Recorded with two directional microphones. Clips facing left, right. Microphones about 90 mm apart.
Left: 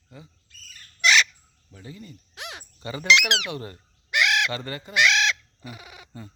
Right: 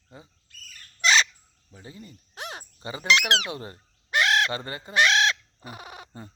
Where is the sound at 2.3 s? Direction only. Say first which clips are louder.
Right 3 dB; 40° right (ahead or behind).